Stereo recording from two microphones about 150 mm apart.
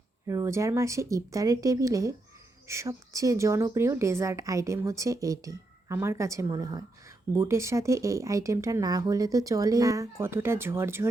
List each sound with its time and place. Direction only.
0.3 s speech: 20° right (ahead or behind)